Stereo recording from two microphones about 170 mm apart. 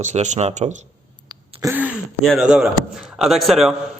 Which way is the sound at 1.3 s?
20° right (ahead or behind).